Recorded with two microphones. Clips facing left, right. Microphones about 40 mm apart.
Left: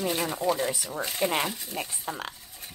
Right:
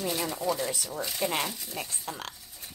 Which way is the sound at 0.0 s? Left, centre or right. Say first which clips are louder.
Left 3 dB; left.